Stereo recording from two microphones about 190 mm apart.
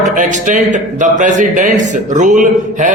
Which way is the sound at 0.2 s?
40° right (ahead or behind).